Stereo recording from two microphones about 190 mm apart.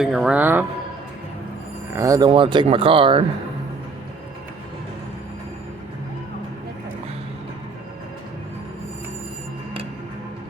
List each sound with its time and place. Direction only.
0.0 s speech: 5° right (ahead or behind)
2.0 s speech: 20° right (ahead or behind)